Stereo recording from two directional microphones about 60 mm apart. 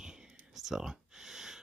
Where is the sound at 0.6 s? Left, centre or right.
Centre.